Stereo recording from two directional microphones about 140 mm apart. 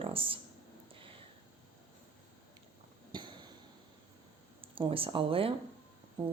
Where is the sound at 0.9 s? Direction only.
40° right (ahead or behind).